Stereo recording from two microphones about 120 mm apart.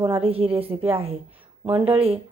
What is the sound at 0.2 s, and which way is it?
A woman's voice, 55° right (ahead or behind).